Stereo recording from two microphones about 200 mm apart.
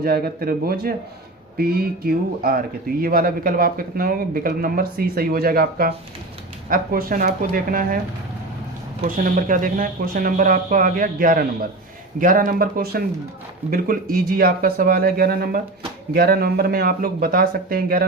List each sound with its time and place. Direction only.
0.0 s a man's voice: 50° right (ahead or behind)
9.0 s a man's voice: 40° right (ahead or behind)